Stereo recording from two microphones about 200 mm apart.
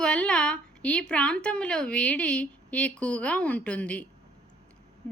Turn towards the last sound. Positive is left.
turn(degrees=10)  # may be behind; listen again after turning